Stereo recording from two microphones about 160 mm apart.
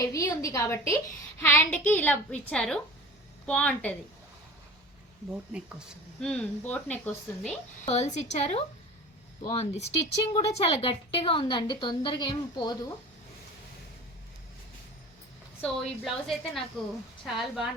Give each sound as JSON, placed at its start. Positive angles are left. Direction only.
{"t": 0.1, "sound": "a woman's voice", "side_deg": 20}
{"t": 5.3, "sound": "speech", "side_deg": -5}
{"t": 6.1, "sound": "speech", "side_deg": 5}
{"t": 7.9, "sound": "a woman's voice", "side_deg": 45}
{"t": 15.6, "sound": "a woman's voice", "side_deg": 0}